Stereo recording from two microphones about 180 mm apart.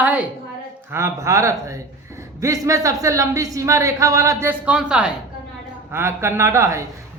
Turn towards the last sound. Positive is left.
turn(degrees=-15)  # may be behind; listen again after turning